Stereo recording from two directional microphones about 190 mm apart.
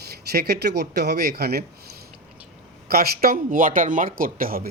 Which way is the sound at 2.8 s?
50° right (ahead or behind).